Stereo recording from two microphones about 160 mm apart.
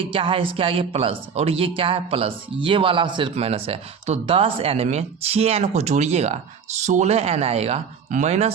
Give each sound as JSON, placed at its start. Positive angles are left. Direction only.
{"t": 0.0, "sound": "speech", "side_deg": -35}